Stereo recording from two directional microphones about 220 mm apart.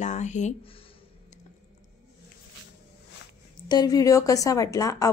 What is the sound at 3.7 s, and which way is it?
A woman's voice, 15° left (ahead or behind).